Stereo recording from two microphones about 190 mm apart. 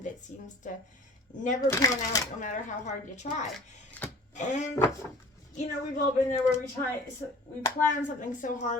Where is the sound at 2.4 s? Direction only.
40° left (ahead or behind).